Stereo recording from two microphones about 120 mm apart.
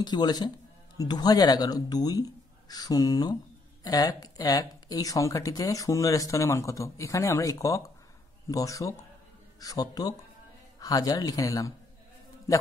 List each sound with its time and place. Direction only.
0.0 s speech: 35° left (ahead or behind)